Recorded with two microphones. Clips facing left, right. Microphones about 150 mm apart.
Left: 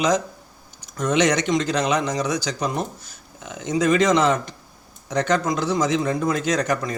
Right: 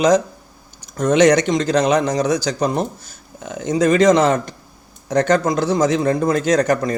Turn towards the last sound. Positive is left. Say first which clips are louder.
# right 6 dB
turn(degrees=-45)  # may be behind; listen again after turning